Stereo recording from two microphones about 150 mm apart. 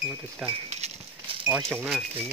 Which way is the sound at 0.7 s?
40° right (ahead or behind).